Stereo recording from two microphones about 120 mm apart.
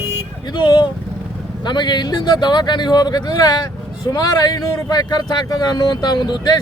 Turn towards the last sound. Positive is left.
turn(degrees=35)  # may be behind; listen again after turning